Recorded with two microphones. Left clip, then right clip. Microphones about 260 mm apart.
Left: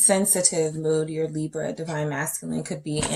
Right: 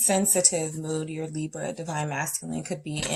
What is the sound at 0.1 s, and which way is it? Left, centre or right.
Speech, right.